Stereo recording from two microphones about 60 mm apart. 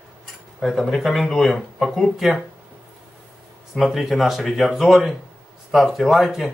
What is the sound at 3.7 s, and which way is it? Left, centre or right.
Speech, centre.